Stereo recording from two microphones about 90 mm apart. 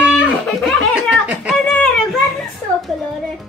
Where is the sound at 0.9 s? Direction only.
10° right (ahead or behind).